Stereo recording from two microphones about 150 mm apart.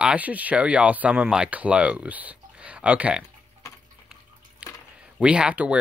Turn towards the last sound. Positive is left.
turn(degrees=-10)  # may be behind; listen again after turning